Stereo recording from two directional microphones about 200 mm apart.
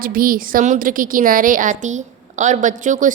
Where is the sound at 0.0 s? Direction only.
45° right (ahead or behind).